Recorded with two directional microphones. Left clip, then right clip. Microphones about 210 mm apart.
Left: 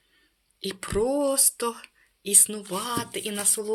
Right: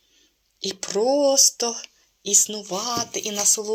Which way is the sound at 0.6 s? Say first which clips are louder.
Right 4 dB; 15° left (ahead or behind).